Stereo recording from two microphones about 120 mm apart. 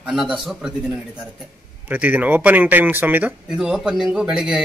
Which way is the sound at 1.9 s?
15° right (ahead or behind).